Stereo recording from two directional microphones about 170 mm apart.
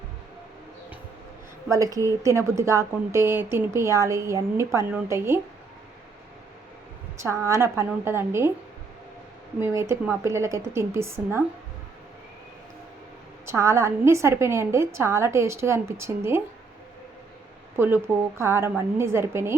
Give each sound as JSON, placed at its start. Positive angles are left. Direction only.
{"t": 1.6, "sound": "a woman's voice", "side_deg": -20}
{"t": 7.2, "sound": "a woman's voice", "side_deg": -15}
{"t": 9.6, "sound": "a woman's voice", "side_deg": -15}
{"t": 13.4, "sound": "a woman's voice", "side_deg": -15}
{"t": 17.7, "sound": "a woman's voice", "side_deg": -15}